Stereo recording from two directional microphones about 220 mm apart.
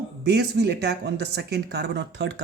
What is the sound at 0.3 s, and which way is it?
A man's voice, 50° right (ahead or behind).